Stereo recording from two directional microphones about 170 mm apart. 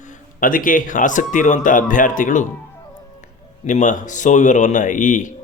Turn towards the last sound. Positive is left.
turn(degrees=50)  # may be behind; listen again after turning